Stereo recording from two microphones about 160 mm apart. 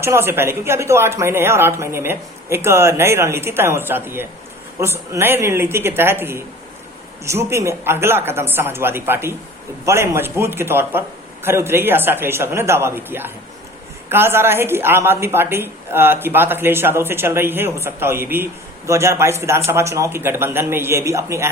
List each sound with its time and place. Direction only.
0.0 s a woman's voice: 15° right (ahead or behind)